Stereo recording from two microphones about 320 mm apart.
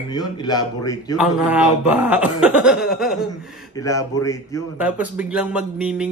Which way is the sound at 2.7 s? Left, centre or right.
Left.